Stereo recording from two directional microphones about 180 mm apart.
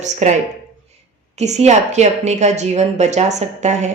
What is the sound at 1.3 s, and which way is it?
Speech, 40° right (ahead or behind).